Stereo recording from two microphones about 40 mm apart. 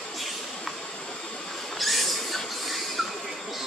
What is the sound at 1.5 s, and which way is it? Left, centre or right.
Train, centre.